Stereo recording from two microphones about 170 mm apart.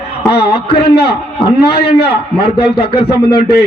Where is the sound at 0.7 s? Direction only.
30° left (ahead or behind).